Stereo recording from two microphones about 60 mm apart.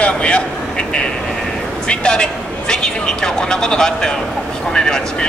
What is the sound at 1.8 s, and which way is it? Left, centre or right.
A man's voice, centre.